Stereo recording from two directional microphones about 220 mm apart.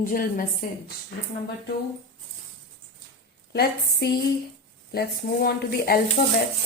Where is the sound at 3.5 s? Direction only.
45° left (ahead or behind).